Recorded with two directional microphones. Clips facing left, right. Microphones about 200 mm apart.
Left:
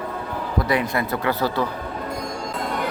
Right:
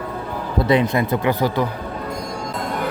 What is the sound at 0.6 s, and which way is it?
A man's voice, 25° right (ahead or behind).